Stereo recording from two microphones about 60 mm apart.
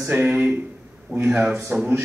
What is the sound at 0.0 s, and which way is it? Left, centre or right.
Speech, right.